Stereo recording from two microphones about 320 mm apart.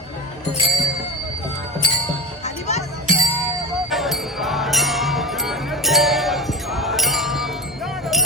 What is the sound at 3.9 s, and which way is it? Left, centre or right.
Music, centre.